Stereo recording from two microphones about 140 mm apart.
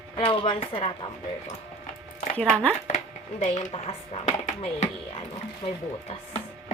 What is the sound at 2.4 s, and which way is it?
Speech, 10° left (ahead or behind).